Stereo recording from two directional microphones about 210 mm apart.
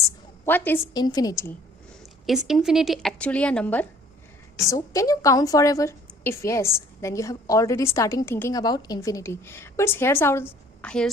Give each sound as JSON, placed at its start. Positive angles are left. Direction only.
{"t": 0.4, "sound": "a woman's voice", "side_deg": 10}
{"t": 2.2, "sound": "a woman's voice", "side_deg": 0}